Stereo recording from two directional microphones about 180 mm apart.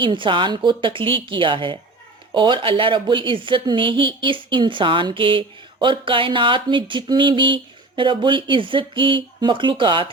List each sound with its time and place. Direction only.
0.0 s speech: 25° right (ahead or behind)